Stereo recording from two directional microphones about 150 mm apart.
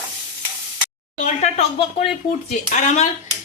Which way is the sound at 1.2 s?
45° left (ahead or behind).